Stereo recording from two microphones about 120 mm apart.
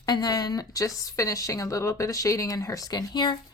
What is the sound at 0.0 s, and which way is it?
Speech, 35° left (ahead or behind).